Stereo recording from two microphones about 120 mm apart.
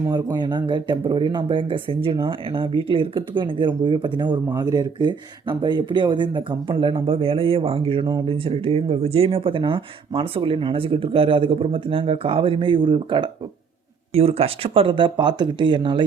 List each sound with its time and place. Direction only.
0.1 s speech: 35° right (ahead or behind)
14.1 s speech: 55° right (ahead or behind); by 16.0 s 40° right (ahead or behind)